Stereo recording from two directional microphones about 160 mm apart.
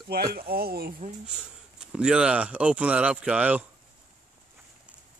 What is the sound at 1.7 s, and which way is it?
Speech, 5° right (ahead or behind).